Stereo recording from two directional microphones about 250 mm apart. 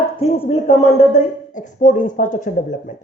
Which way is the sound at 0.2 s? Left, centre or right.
Left.